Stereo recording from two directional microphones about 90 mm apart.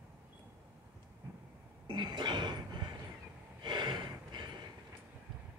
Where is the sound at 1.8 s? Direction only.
55° right (ahead or behind).